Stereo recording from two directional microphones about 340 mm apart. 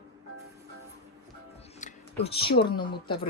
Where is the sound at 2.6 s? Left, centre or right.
Centre.